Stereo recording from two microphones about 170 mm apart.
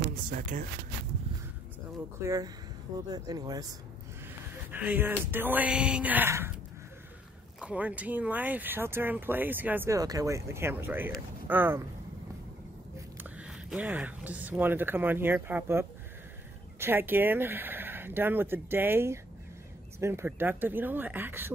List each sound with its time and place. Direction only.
0.1 s speech: 55° right (ahead or behind)
2.2 s speech: 20° right (ahead or behind)
4.6 s speech: 10° right (ahead or behind)
7.6 s speech: 10° right (ahead or behind)
13.2 s speech: 10° right (ahead or behind)